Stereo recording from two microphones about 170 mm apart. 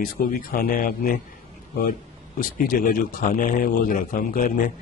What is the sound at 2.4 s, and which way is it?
Speech, 55° left (ahead or behind).